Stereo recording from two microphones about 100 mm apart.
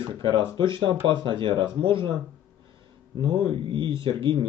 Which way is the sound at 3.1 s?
55° right (ahead or behind).